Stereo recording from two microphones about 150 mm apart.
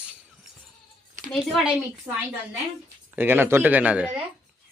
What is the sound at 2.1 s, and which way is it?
A woman's voice, 20° right (ahead or behind).